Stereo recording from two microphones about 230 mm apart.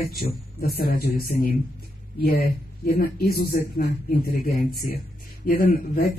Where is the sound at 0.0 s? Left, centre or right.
Left.